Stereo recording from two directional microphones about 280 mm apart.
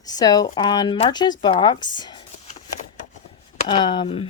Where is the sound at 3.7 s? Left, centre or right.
Centre.